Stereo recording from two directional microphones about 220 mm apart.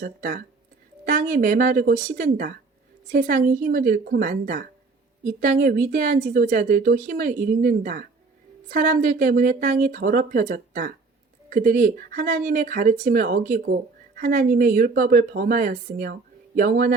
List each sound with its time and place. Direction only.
0.0 s speech: 40° right (ahead or behind)